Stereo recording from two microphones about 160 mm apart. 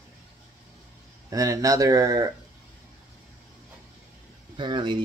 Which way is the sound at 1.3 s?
20° right (ahead or behind).